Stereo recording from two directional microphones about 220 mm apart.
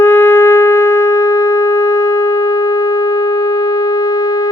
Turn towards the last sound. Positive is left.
turn(degrees=15)  # may be behind; listen again after turning